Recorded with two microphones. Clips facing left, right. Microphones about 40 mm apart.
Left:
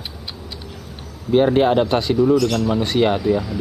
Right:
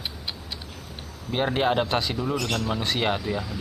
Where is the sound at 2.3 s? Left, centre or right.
Right.